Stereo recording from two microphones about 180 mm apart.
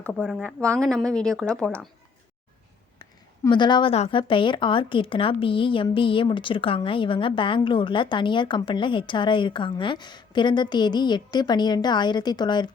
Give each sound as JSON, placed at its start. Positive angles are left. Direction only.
{"t": 0.0, "sound": "a woman's voice", "side_deg": 5}
{"t": 3.0, "sound": "a woman's voice", "side_deg": 25}